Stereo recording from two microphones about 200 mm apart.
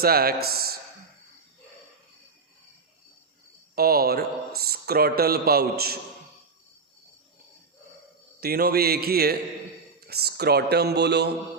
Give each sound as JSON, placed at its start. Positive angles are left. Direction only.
{"t": 0.0, "sound": "speech", "side_deg": -50}
{"t": 3.8, "sound": "a man's voice", "side_deg": -50}
{"t": 8.4, "sound": "a man's voice", "side_deg": -50}